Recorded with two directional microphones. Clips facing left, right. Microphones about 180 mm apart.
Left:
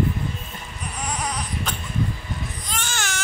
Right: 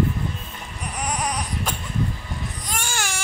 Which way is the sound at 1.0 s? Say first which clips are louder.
Right 2 dB; 15° right (ahead or behind).